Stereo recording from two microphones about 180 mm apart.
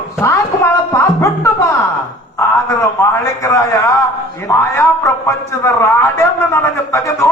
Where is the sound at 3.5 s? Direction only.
15° left (ahead or behind).